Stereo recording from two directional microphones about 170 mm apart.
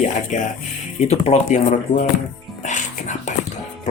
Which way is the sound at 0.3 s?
45° left (ahead or behind).